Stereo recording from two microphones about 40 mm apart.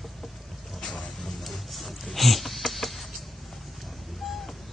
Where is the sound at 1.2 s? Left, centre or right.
Centre.